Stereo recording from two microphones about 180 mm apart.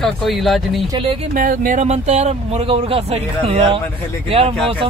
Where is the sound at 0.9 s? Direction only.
30° right (ahead or behind).